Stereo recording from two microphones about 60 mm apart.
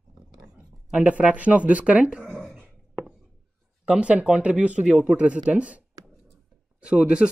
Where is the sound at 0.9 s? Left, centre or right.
Right.